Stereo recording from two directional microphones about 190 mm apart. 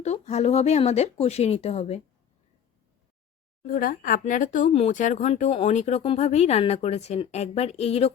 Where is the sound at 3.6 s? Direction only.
50° left (ahead or behind).